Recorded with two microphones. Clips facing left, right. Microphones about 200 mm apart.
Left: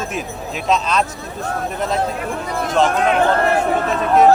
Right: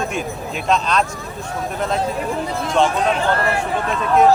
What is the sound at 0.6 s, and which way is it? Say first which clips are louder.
Speech: even; centre (ahead or behind).